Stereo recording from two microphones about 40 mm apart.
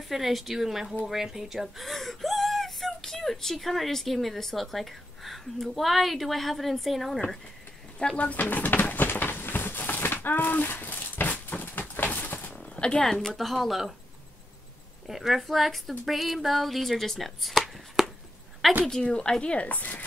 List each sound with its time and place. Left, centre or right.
0.1 s speech: centre
8.2 s speech: left
8.5 s a sound: left
12.7 s a sound: left
13.0 s speech: centre
15.0 s speech: centre
19.0 s speech: left